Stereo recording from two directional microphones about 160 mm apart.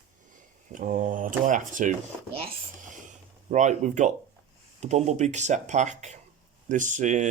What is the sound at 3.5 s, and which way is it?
Speech, 50° right (ahead or behind).